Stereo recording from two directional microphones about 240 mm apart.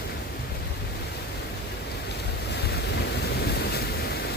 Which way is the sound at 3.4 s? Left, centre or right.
Left.